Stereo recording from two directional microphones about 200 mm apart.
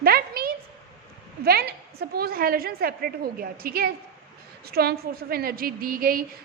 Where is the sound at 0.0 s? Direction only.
50° right (ahead or behind).